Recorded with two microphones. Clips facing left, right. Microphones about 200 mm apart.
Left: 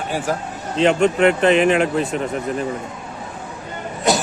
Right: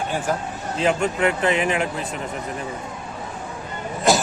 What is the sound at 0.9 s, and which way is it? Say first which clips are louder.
Speech: left 5 dB; 70° left (ahead or behind).